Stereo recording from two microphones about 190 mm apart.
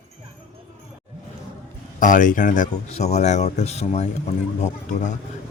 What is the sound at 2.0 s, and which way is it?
Speech, 45° left (ahead or behind).